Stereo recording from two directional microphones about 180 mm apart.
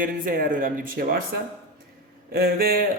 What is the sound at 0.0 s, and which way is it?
Speech, 50° right (ahead or behind).